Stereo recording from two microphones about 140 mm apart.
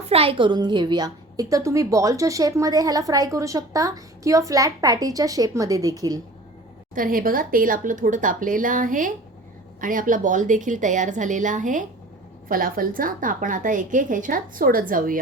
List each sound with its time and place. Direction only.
0.1 s a woman's voice: 40° right (ahead or behind); by 6.1 s 25° right (ahead or behind)
6.9 s a woman's voice: 85° right; by 11.9 s 65° right (ahead or behind)
12.5 s a woman's voice: 90° right